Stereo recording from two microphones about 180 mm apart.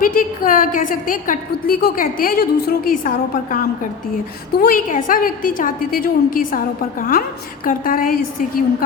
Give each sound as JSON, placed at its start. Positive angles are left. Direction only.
{"t": 0.0, "sound": "a woman's voice", "side_deg": 50}
{"t": 4.1, "sound": "a woman's voice", "side_deg": 55}